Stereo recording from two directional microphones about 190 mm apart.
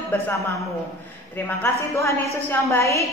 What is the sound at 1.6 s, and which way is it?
A woman's voice, 15° left (ahead or behind).